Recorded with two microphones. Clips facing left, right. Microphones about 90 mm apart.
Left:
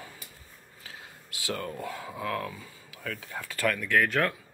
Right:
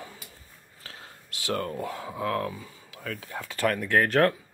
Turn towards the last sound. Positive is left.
turn(degrees=-40)  # may be behind; listen again after turning